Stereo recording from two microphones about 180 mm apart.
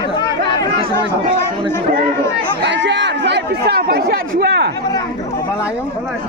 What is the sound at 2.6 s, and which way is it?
Speech, 75° right (ahead or behind).